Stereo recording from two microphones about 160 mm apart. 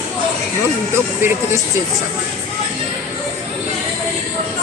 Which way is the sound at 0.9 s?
15° right (ahead or behind).